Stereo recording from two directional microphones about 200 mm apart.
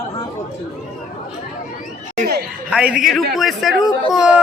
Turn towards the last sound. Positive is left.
turn(degrees=-5)  # may be behind; listen again after turning